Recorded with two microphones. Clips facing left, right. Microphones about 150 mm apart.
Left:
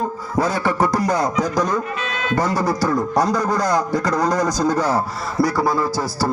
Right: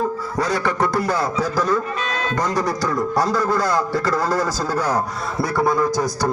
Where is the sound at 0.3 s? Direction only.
20° left (ahead or behind).